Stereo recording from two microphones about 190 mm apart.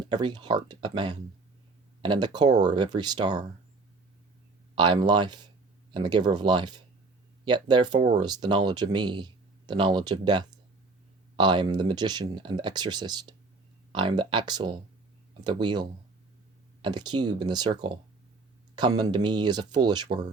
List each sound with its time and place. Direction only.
0.0 s speech: 25° right (ahead or behind)
4.7 s speech: 25° right (ahead or behind)